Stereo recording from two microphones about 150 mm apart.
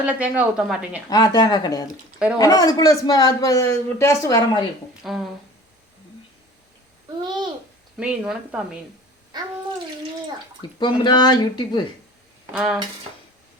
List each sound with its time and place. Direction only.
0.0 s a woman's voice: 10° right (ahead or behind)
1.1 s a man's voice: 25° left (ahead or behind)
2.1 s speech: 5° right (ahead or behind)
2.4 s a man's voice: 25° left (ahead or behind)
5.0 s speech: centre (ahead or behind)
7.9 s speech: 5° right (ahead or behind)
10.6 s a man's voice: 30° left (ahead or behind)
12.5 s speech: 5° right (ahead or behind)